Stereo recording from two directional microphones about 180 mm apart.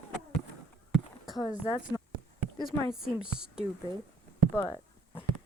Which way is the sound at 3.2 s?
5° right (ahead or behind).